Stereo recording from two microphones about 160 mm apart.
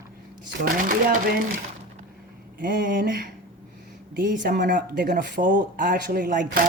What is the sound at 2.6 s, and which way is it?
Speech, 65° right (ahead or behind).